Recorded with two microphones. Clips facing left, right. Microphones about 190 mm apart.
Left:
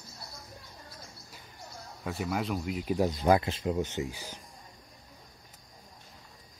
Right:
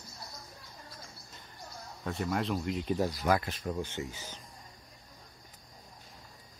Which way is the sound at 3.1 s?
25° left (ahead or behind).